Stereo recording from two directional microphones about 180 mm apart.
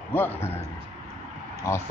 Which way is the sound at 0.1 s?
10° left (ahead or behind).